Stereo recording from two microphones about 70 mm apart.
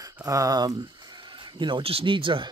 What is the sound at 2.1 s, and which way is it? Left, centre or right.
Speech, right.